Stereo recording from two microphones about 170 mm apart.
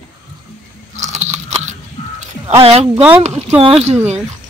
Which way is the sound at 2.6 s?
35° right (ahead or behind).